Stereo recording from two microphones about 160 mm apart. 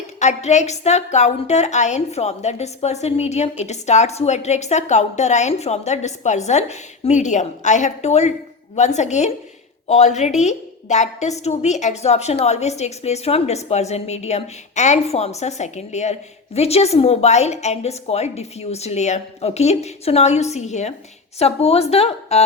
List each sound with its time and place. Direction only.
0.2 s a woman's voice: 45° left (ahead or behind)